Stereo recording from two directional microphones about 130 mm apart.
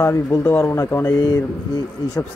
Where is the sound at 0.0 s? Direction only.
20° left (ahead or behind).